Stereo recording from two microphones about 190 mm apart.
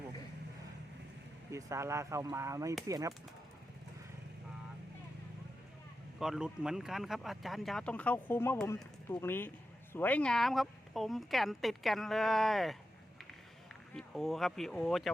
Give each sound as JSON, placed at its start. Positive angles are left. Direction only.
{"t": 1.5, "sound": "speech", "side_deg": -15}
{"t": 6.1, "sound": "speech", "side_deg": -5}
{"t": 13.9, "sound": "speech", "side_deg": 0}